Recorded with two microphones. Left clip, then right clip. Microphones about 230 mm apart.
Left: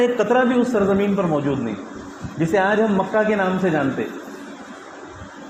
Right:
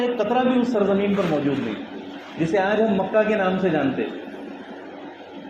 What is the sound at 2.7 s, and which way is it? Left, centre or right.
Speech, left.